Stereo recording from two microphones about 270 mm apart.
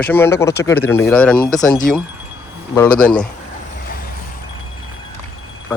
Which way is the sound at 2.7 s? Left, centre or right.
Centre.